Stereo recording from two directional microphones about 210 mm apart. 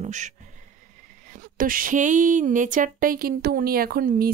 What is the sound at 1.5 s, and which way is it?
Speech, 40° right (ahead or behind).